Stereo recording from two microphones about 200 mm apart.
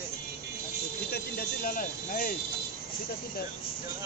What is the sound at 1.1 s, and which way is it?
Speech, 45° left (ahead or behind).